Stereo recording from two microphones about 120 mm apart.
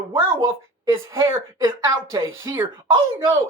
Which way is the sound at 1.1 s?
25° right (ahead or behind).